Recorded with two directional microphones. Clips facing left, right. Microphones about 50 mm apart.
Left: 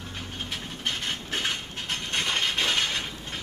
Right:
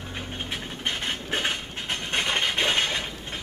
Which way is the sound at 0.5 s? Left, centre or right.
Right.